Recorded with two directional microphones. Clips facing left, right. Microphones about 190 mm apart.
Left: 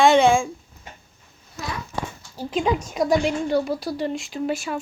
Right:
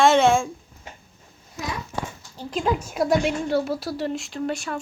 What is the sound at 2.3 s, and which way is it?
A woman's voice, 5° left (ahead or behind).